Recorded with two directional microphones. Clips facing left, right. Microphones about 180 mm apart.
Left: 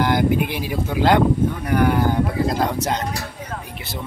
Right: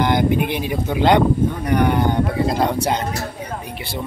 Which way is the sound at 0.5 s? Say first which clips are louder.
Right 2 dB; 5° left (ahead or behind).